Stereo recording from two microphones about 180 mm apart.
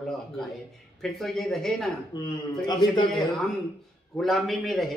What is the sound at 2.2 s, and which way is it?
Speech, 25° left (ahead or behind).